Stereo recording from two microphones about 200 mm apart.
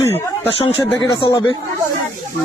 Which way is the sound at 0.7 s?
25° left (ahead or behind).